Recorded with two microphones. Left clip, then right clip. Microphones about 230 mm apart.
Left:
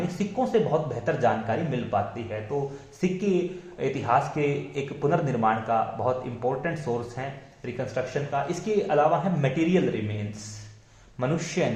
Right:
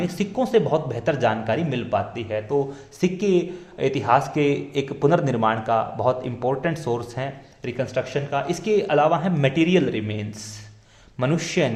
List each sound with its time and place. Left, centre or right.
0.2 s speech: right
11.2 s speech: right